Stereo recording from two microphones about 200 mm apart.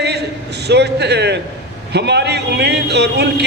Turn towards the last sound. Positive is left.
turn(degrees=-55)  # may be behind; listen again after turning